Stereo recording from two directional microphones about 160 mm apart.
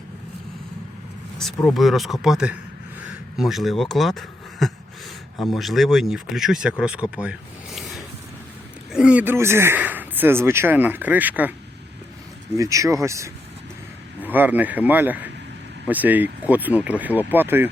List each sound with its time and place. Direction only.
1.6 s speech: centre (ahead or behind)
8.9 s speech: 5° right (ahead or behind)
12.5 s speech: 20° right (ahead or behind)